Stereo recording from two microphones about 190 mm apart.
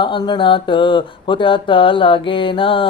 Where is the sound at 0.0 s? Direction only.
25° left (ahead or behind).